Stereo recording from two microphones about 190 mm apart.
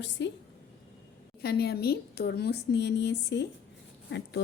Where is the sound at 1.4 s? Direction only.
55° left (ahead or behind).